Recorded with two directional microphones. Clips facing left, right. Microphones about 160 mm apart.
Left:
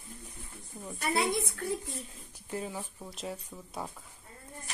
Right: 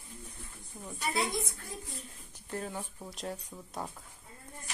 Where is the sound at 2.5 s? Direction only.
5° left (ahead or behind).